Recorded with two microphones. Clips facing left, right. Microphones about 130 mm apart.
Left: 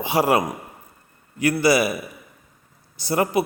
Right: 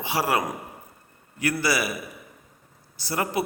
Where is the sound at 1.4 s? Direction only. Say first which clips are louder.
Left 7 dB; 20° left (ahead or behind).